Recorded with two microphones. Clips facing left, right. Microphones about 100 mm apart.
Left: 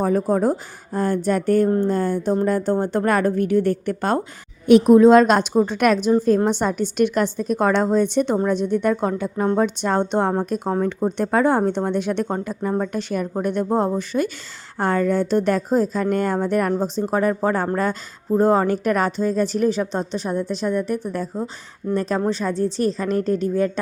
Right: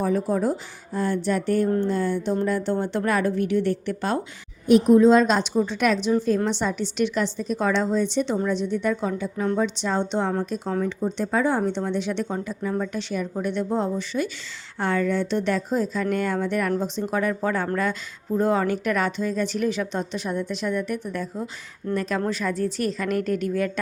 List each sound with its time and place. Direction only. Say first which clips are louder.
0.0 s a woman's voice: left 4 dB; 45° left (ahead or behind)
4.7 s a woman's voice: left 4 dB; 75° left (ahead or behind); by 21.5 s 35° left (ahead or behind)
21.8 s speech: left 4 dB; 10° left (ahead or behind)
22.3 s speech: left 4 dB; 30° left (ahead or behind)